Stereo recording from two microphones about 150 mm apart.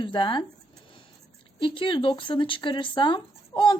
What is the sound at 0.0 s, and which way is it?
Speech, 30° left (ahead or behind).